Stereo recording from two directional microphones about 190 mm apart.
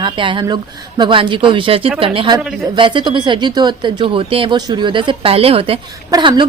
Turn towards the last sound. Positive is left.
turn(degrees=-20)  # may be behind; listen again after turning